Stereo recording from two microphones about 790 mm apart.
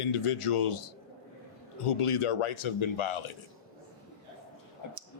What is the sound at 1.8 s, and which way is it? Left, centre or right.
Speech, left.